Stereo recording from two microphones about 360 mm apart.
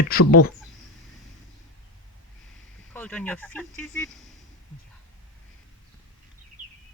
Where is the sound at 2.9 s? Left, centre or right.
Centre.